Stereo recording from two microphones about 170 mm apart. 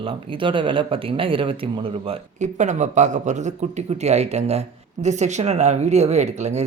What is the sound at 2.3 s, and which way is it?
Speech, 45° right (ahead or behind).